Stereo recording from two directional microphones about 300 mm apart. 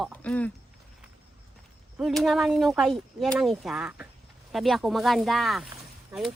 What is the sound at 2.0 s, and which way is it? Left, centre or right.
Speech, centre.